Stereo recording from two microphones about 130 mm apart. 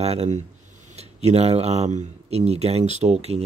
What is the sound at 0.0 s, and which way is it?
Speech, 55° right (ahead or behind).